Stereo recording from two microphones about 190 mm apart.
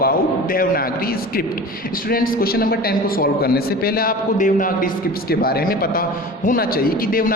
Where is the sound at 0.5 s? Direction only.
50° left (ahead or behind).